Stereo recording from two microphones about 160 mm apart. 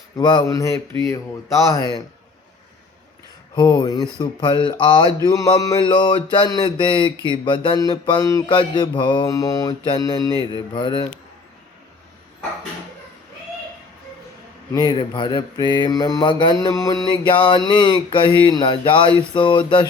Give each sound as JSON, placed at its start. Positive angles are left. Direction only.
{"t": 0.2, "sound": "mantra", "side_deg": 30}
{"t": 3.5, "sound": "mantra", "side_deg": 30}
{"t": 14.7, "sound": "mantra", "side_deg": 25}